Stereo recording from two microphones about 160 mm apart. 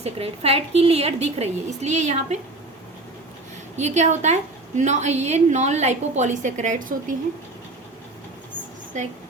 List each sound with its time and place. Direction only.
0.0 s a woman's voice: 40° right (ahead or behind)
3.8 s a woman's voice: 45° right (ahead or behind)
8.9 s a woman's voice: 50° right (ahead or behind)